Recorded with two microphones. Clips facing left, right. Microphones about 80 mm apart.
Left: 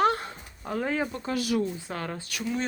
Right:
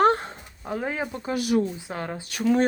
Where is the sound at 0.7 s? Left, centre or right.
Centre.